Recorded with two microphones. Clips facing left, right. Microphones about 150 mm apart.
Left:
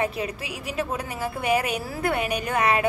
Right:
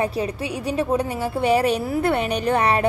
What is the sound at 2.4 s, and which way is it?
Speech, 35° right (ahead or behind).